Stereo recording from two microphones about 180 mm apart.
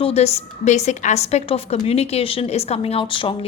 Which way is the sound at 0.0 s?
35° left (ahead or behind).